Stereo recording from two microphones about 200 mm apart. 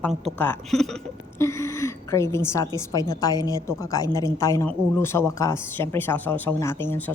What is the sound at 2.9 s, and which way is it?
Speech, 20° left (ahead or behind).